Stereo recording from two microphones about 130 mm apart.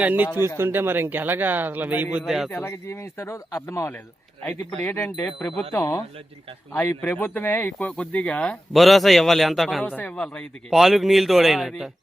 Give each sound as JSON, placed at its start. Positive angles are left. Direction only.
{"t": 0.0, "sound": "a man's voice", "side_deg": -10}
{"t": 2.6, "sound": "speech", "side_deg": 20}
{"t": 5.1, "sound": "speech", "side_deg": 5}
{"t": 5.7, "sound": "speech", "side_deg": 25}
{"t": 9.8, "sound": "speech", "side_deg": 10}